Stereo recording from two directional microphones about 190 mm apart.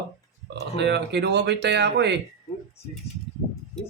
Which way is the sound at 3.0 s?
15° left (ahead or behind).